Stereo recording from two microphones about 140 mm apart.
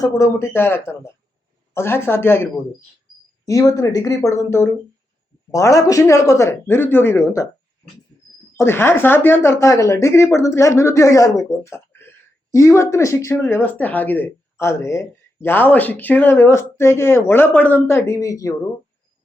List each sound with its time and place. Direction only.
0.0 s speech: 20° left (ahead or behind)
8.5 s speech: 15° left (ahead or behind)